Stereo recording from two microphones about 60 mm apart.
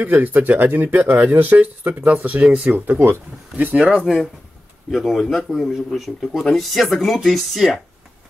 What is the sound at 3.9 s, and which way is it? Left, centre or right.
Speech, centre.